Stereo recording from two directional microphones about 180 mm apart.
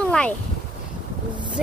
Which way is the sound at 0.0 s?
5° left (ahead or behind).